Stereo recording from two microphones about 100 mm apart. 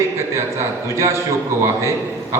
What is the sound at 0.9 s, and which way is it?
Speech, 30° right (ahead or behind).